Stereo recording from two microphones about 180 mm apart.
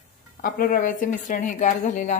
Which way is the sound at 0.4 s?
55° left (ahead or behind).